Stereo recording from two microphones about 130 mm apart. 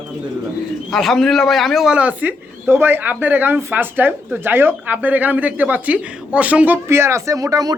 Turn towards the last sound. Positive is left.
turn(degrees=-30)  # may be behind; listen again after turning